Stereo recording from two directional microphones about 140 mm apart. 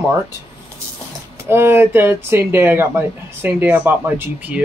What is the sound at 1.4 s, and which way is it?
Speech, 15° right (ahead or behind).